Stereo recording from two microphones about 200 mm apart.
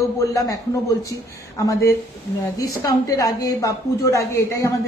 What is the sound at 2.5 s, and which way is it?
A man's voice, 20° left (ahead or behind).